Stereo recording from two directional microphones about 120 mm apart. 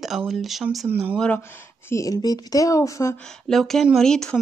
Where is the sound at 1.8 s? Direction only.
25° left (ahead or behind).